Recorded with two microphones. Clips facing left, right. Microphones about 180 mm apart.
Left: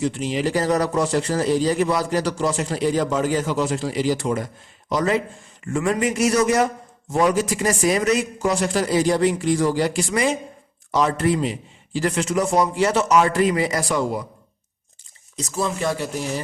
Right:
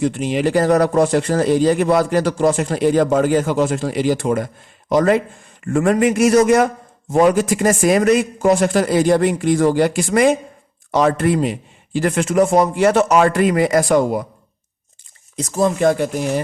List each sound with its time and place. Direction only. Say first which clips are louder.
0.0 s speech: right 4 dB; 55° right (ahead or behind)
15.4 s speech: right 7 dB; 50° right (ahead or behind)